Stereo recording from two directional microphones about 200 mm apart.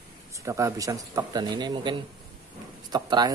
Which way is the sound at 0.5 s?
15° right (ahead or behind).